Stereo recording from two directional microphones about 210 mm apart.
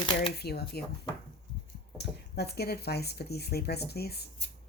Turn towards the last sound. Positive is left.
turn(degrees=50)  # may be behind; listen again after turning